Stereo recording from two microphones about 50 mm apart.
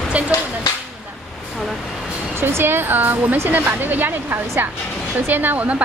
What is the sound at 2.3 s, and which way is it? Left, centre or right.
Speech, right.